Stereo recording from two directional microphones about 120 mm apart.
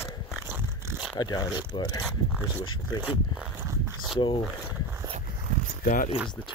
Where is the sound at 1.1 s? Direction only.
35° left (ahead or behind).